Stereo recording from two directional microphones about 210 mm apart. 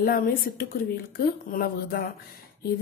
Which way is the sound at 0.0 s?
45° left (ahead or behind).